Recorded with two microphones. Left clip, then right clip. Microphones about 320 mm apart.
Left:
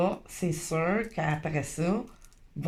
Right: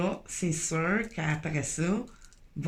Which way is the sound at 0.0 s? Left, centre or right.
Centre.